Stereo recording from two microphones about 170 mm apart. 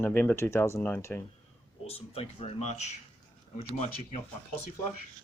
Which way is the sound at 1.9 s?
35° left (ahead or behind).